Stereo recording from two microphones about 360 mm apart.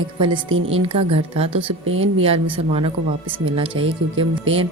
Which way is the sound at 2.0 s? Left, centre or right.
Centre.